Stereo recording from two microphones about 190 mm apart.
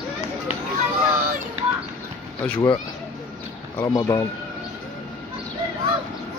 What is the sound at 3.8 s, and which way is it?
Speech, 20° left (ahead or behind).